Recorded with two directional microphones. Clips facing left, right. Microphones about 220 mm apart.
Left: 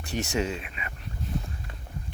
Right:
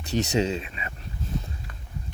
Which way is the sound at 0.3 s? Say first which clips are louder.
Right 4 dB; 20° right (ahead or behind).